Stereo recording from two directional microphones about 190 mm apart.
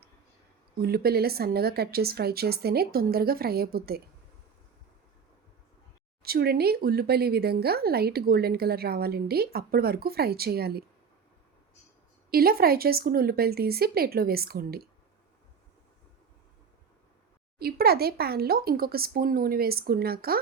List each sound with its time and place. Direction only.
0.8 s speech: 55° right (ahead or behind)
6.2 s speech: 55° right (ahead or behind)
12.3 s speech: 55° right (ahead or behind)
17.6 s speech: 55° right (ahead or behind)